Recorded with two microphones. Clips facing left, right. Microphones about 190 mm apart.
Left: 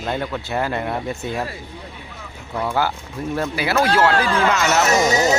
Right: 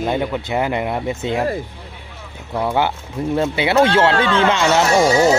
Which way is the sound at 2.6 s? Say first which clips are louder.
Right 3 dB; 20° right (ahead or behind).